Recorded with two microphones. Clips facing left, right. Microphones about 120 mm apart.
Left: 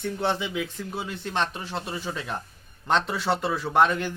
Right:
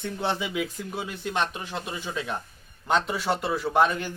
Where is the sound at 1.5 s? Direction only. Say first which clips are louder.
Left 1 dB; 30° left (ahead or behind).